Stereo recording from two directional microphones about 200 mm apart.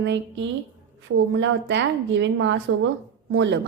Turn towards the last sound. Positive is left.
turn(degrees=-65)  # may be behind; listen again after turning